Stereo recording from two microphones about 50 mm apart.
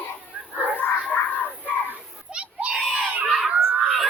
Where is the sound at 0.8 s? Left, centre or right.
Left.